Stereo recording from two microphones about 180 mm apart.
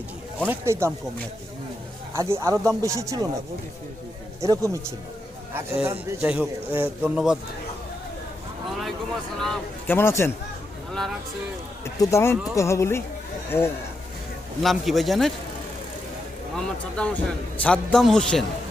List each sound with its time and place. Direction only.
0.3 s a man's voice: 10° right (ahead or behind)
2.1 s a man's voice: 15° right (ahead or behind)
4.4 s a man's voice: 20° right (ahead or behind)
9.4 s speech: 5° left (ahead or behind)
11.9 s speech: 15° left (ahead or behind)
14.6 s a man's voice: centre (ahead or behind)
16.6 s a man's voice: 5° left (ahead or behind)